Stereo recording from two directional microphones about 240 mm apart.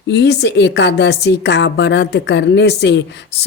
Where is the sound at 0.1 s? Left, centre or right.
Left.